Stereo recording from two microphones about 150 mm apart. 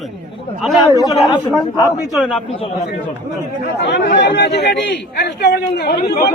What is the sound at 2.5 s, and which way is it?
Speech, 40° left (ahead or behind).